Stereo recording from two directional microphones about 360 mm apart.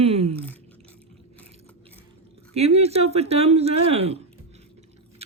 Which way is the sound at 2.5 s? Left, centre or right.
Centre.